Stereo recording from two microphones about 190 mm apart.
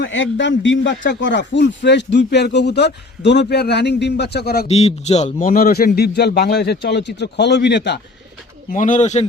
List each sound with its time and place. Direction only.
0.0 s a man's voice: 75° left (ahead or behind); by 4.6 s 60° left (ahead or behind)
4.7 s speech: 35° left (ahead or behind); by 8.0 s 65° left (ahead or behind)
8.7 s speech: 40° left (ahead or behind)